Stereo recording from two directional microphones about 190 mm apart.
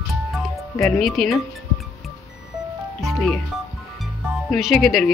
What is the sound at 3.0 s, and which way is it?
Music, centre (ahead or behind).